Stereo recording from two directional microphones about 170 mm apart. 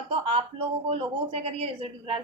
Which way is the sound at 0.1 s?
30° right (ahead or behind).